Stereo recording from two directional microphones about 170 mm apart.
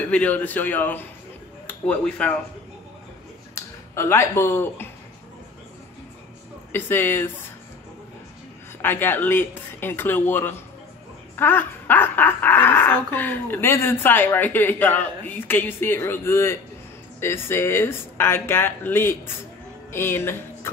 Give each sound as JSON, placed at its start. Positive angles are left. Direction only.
{"t": 0.0, "sound": "speech", "side_deg": 10}
{"t": 3.5, "sound": "speech", "side_deg": 15}
{"t": 6.7, "sound": "speech", "side_deg": 10}
{"t": 8.8, "sound": "speech", "side_deg": 10}